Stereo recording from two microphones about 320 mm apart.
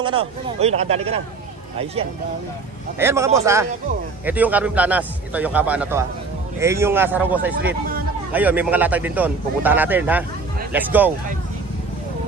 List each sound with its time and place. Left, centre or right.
0.6 s speech: centre
3.0 s speech: centre